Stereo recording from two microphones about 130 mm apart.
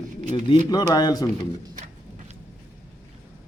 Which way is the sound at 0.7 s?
30° left (ahead or behind).